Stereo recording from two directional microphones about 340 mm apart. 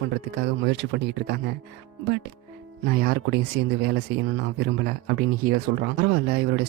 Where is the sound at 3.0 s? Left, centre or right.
Right.